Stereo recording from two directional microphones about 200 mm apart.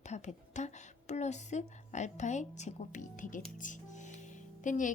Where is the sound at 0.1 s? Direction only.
35° left (ahead or behind).